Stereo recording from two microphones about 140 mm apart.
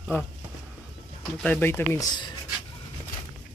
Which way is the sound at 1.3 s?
10° left (ahead or behind).